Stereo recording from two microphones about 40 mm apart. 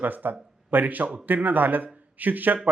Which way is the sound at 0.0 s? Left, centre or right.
Right.